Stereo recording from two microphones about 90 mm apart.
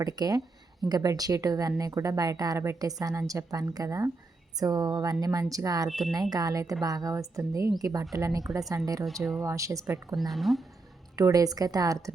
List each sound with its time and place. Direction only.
0.0 s a woman's voice: 45° right (ahead or behind)
5.9 s speech: centre (ahead or behind)
6.3 s a woman's voice: 40° right (ahead or behind)
10.2 s speech: centre (ahead or behind)
11.2 s a woman's voice: 40° right (ahead or behind)